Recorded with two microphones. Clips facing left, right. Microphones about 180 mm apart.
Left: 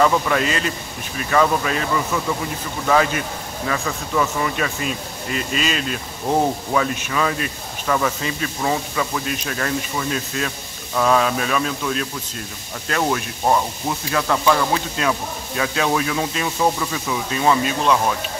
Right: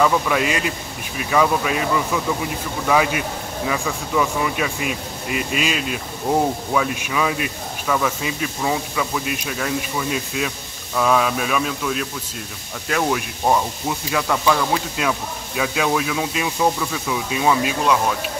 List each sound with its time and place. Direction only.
0.0 s speech: 5° right (ahead or behind)
2.9 s speech: 10° right (ahead or behind)